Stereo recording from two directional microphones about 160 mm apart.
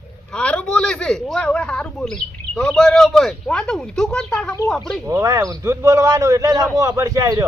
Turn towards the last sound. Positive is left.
turn(degrees=-20)  # may be behind; listen again after turning